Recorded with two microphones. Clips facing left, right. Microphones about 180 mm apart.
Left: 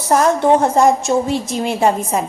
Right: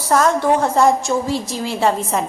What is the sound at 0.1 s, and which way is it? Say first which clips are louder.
A woman's voice: left 2 dB; 20° left (ahead or behind).